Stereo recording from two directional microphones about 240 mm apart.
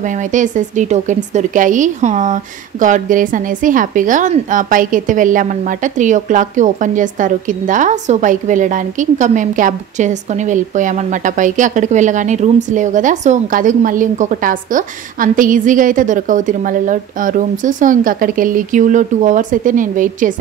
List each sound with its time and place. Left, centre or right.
0.3 s a woman's voice: right